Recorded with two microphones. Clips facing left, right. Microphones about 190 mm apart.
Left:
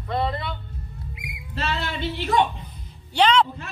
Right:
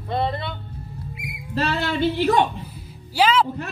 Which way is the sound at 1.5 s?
50° right (ahead or behind).